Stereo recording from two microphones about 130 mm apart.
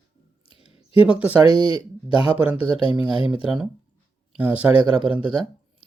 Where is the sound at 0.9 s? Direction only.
10° right (ahead or behind).